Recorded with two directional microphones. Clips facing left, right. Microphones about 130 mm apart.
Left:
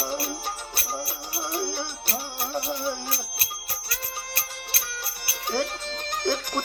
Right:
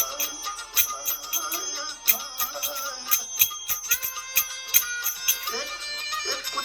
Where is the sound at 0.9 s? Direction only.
30° left (ahead or behind).